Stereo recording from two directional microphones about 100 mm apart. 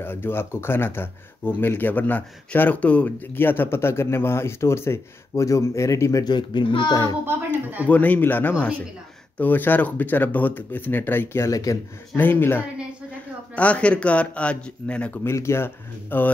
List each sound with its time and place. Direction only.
0.0 s speech: 20° left (ahead or behind)
6.2 s a child's voice: 50° left (ahead or behind)
7.9 s a man's voice: 15° left (ahead or behind)
11.4 s speech: 35° left (ahead or behind)
12.2 s a man's voice: 20° left (ahead or behind)
15.2 s speech: 25° left (ahead or behind)